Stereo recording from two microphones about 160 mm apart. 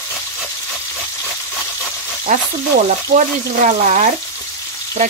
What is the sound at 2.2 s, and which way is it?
Frying, 50° right (ahead or behind).